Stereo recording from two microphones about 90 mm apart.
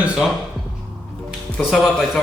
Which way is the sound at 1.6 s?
5° left (ahead or behind).